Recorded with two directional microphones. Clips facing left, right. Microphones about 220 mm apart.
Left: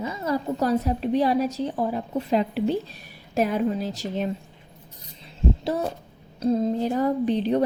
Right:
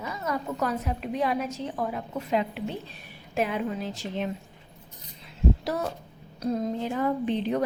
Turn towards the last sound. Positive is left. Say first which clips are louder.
# left 4 dB
turn(degrees=35)  # may be behind; listen again after turning